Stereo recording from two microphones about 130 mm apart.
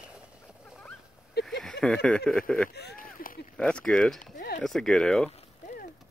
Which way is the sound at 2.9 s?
90° left.